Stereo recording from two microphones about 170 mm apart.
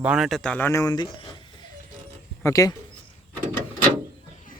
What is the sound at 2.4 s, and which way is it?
Speech, 20° left (ahead or behind).